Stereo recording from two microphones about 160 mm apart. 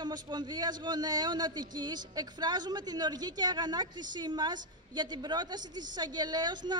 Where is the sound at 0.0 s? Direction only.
25° right (ahead or behind).